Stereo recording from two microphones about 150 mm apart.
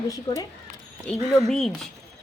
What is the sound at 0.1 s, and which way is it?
Speech, 25° left (ahead or behind).